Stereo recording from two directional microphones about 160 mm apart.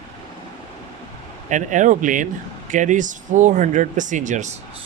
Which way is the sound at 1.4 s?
50° right (ahead or behind).